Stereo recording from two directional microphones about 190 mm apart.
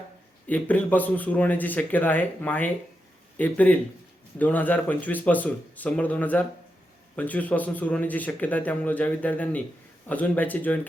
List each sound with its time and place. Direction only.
0.4 s a man's voice: 10° left (ahead or behind)